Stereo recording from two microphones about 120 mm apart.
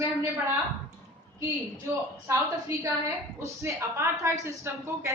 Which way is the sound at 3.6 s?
25° right (ahead or behind).